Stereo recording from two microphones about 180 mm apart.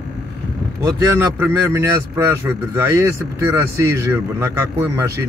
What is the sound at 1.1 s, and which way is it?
Speech, 15° right (ahead or behind).